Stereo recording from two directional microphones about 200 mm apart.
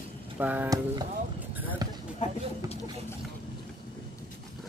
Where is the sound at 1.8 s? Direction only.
20° right (ahead or behind).